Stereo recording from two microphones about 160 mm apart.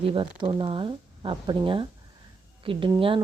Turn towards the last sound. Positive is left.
turn(degrees=-30)  # may be behind; listen again after turning